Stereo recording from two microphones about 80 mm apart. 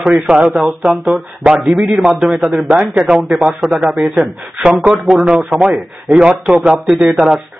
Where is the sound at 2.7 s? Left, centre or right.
Centre.